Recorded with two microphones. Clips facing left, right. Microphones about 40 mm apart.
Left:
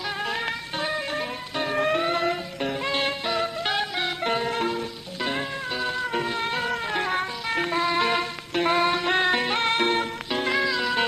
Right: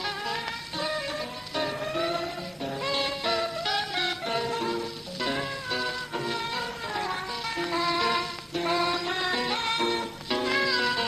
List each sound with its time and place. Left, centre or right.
0.3 s music: left
1.7 s music: left
2.8 s music: left
4.8 s music: left
10.5 s music: centre